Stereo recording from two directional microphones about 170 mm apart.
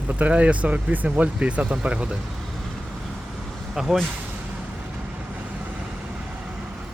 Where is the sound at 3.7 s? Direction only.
Centre (ahead or behind).